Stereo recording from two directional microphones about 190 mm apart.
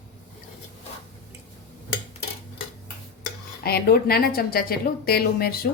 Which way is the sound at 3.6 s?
55° left (ahead or behind).